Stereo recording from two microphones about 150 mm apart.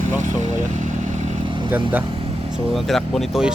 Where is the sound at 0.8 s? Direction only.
55° right (ahead or behind).